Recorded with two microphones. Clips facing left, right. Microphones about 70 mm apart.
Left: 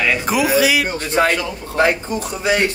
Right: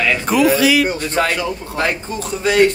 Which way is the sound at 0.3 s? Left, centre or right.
Centre.